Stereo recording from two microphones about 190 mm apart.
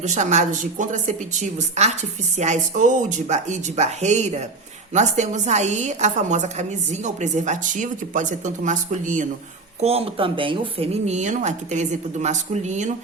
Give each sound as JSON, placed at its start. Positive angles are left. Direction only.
{"t": 0.0, "sound": "a woman's voice", "side_deg": -40}